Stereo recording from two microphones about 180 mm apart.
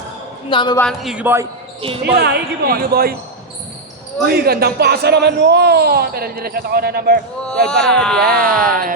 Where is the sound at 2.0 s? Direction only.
65° right (ahead or behind).